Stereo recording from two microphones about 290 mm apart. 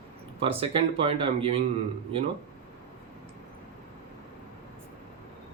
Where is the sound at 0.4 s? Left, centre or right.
Centre.